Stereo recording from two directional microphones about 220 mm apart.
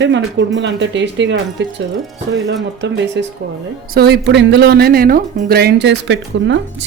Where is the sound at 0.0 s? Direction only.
55° right (ahead or behind).